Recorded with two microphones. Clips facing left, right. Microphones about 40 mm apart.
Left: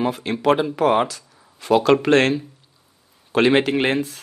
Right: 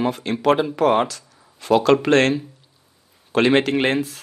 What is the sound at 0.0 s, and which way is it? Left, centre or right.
Speech, centre.